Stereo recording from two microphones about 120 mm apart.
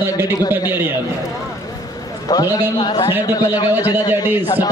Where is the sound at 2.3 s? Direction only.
30° left (ahead or behind).